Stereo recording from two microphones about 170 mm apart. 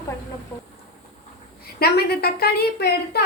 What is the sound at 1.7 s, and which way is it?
A woman's voice, 70° left (ahead or behind).